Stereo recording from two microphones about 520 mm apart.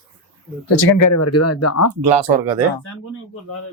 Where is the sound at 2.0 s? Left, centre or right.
Right.